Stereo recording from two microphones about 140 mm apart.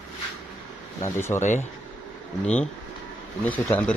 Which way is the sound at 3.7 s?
15° left (ahead or behind).